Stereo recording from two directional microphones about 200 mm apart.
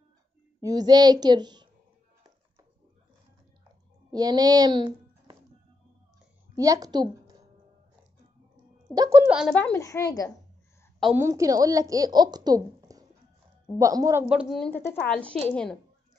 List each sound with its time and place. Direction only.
0.6 s a woman's voice: 20° right (ahead or behind)
4.1 s speech: 20° right (ahead or behind)
6.5 s a woman's voice: 15° right (ahead or behind)
8.9 s speech: 15° right (ahead or behind)
9.3 s speech: 5° right (ahead or behind)
9.6 s speech: 10° left (ahead or behind)
11.1 s speech: 15° right (ahead or behind)
14.3 s speech: centre (ahead or behind)